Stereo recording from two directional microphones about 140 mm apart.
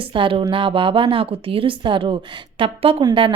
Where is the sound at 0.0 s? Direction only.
40° right (ahead or behind).